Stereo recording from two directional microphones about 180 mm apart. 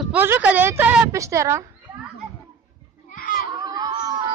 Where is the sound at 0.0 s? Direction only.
10° right (ahead or behind).